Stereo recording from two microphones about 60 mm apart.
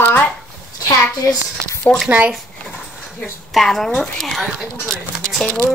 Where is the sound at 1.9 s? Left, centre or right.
Centre.